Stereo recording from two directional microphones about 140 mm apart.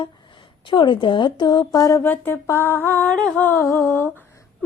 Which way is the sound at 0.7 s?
35° left (ahead or behind).